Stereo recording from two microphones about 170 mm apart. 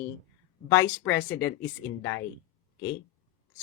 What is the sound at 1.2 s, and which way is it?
Speech, 90° left.